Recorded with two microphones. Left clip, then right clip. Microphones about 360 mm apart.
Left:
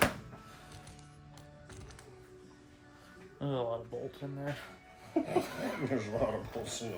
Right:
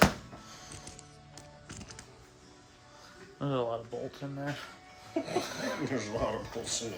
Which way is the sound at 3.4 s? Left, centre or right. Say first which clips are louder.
Right 3 dB; centre.